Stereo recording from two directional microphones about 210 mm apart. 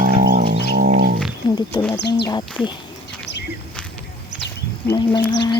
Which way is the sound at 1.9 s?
55° left (ahead or behind).